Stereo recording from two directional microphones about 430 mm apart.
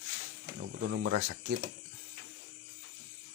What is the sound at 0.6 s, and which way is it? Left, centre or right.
Mantra, right.